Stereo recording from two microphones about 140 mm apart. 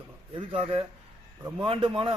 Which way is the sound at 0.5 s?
40° right (ahead or behind).